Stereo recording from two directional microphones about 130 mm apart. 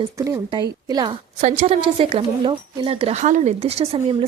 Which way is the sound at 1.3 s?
55° right (ahead or behind).